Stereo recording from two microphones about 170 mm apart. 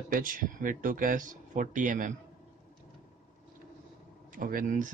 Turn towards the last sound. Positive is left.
turn(degrees=-50)  # may be behind; listen again after turning